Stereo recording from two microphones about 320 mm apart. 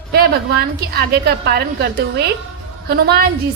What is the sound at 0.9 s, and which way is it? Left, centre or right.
A woman's voice, right.